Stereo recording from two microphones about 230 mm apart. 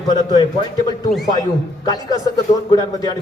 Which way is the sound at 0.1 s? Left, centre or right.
Centre.